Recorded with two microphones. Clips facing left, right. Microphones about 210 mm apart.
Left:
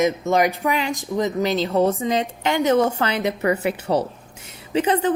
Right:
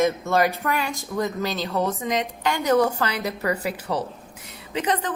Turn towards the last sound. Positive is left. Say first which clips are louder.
# left 6 dB
turn(degrees=30)  # may be behind; listen again after turning